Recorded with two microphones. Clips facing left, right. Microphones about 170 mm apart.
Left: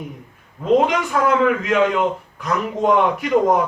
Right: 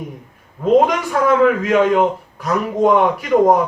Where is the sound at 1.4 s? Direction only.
45° right (ahead or behind).